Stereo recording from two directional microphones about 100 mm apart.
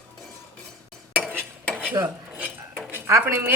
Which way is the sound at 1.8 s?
20° right (ahead or behind).